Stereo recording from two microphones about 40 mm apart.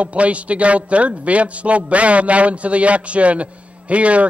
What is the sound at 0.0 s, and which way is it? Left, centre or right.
A man's voice, right.